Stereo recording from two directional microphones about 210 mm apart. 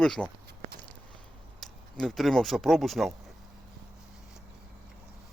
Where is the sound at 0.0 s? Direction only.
Centre (ahead or behind).